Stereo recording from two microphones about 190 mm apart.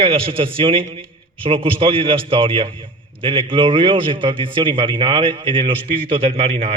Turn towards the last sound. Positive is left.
turn(degrees=-35)  # may be behind; listen again after turning